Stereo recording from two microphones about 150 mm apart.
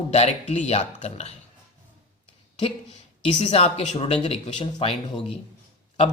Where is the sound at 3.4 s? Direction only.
40° left (ahead or behind).